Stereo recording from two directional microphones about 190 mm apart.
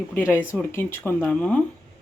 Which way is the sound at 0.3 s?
5° right (ahead or behind).